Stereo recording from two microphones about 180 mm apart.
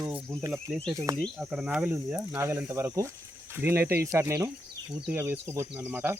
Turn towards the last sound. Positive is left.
turn(degrees=-10)  # may be behind; listen again after turning